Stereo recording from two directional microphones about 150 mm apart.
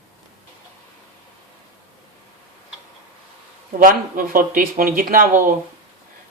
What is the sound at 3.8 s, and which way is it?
Speech, 65° right (ahead or behind).